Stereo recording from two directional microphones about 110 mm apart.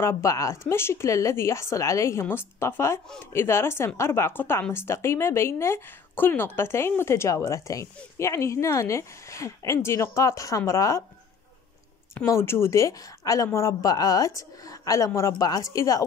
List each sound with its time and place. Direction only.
0.0 s speech: 30° left (ahead or behind)
12.3 s a woman's voice: 20° left (ahead or behind)